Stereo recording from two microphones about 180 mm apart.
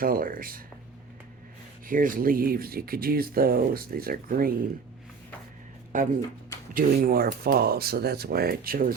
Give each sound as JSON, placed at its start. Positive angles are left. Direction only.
{"t": 0.0, "sound": "speech", "side_deg": -50}
{"t": 1.9, "sound": "speech", "side_deg": -50}
{"t": 5.9, "sound": "speech", "side_deg": -45}